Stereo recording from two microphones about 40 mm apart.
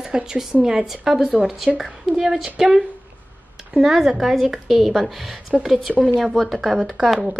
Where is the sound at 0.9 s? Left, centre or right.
Centre.